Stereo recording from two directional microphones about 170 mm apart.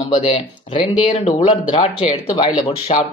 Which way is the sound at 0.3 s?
35° left (ahead or behind).